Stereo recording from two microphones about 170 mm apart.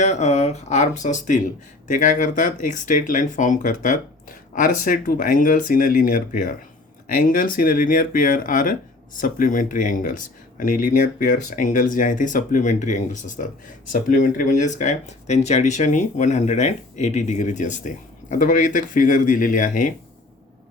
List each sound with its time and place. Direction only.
0.0 s speech: 40° left (ahead or behind)